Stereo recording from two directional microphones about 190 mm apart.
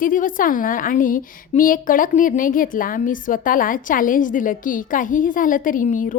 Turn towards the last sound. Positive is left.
turn(degrees=45)  # may be behind; listen again after turning